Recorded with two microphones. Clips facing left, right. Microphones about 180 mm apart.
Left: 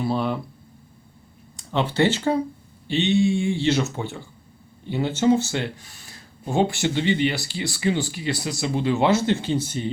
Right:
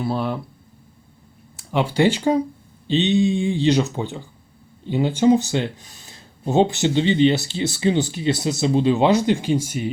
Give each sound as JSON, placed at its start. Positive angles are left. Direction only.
{"t": 0.0, "sound": "speech", "side_deg": 0}
{"t": 1.5, "sound": "speech", "side_deg": -10}